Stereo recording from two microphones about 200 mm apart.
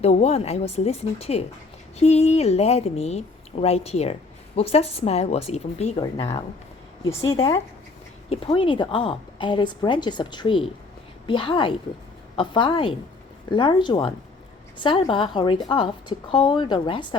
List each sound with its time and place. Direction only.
0.0 s a woman's voice: 30° left (ahead or behind)
8.3 s a woman's voice: 30° left (ahead or behind)